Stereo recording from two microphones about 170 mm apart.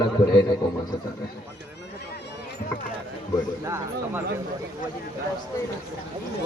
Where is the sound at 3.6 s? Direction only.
15° right (ahead or behind).